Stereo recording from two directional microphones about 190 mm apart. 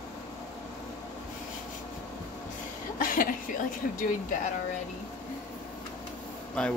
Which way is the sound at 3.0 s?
45° left (ahead or behind).